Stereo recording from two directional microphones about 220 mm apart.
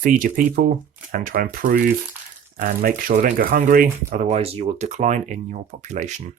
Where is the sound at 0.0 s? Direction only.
40° right (ahead or behind).